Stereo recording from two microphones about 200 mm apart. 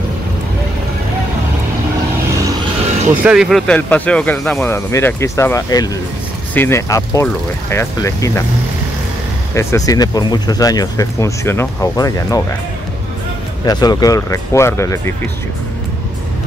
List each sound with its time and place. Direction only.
3.3 s speech: centre (ahead or behind); by 8.5 s 15° left (ahead or behind)
9.5 s speech: 15° left (ahead or behind)
13.7 s speech: 20° left (ahead or behind)